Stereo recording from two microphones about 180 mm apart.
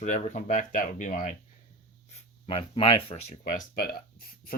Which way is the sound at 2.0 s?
35° left (ahead or behind).